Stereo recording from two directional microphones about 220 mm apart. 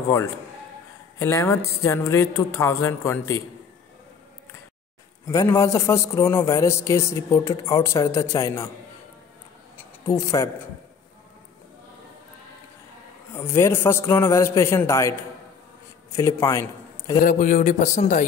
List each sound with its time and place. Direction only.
1.2 s a man's voice: 15° left (ahead or behind)
5.2 s a man's voice: 15° left (ahead or behind)
9.8 s a sound: 15° left (ahead or behind)
13.3 s a man's voice: 10° left (ahead or behind)
17.2 s a man's voice: 35° left (ahead or behind)